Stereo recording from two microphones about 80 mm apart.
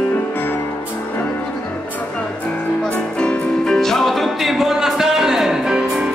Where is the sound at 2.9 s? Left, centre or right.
Centre.